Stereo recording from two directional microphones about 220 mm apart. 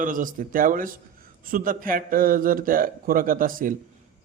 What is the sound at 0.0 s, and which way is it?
A man's voice, 35° right (ahead or behind).